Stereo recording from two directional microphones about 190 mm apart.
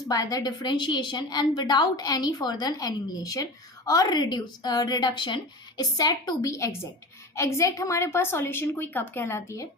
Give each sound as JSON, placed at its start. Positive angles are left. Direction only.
{"t": 0.1, "sound": "a woman's voice", "side_deg": 20}